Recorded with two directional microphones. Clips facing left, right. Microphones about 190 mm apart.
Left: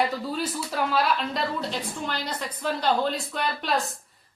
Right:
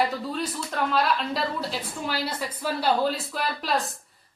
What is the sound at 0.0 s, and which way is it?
Speech, 5° left (ahead or behind).